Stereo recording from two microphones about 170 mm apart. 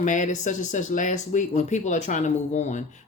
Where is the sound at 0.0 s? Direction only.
45° left (ahead or behind).